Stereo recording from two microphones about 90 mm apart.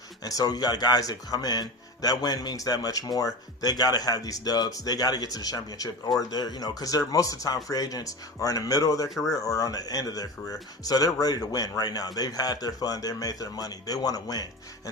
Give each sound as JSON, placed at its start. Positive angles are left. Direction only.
{"t": 0.2, "sound": "speech", "side_deg": 45}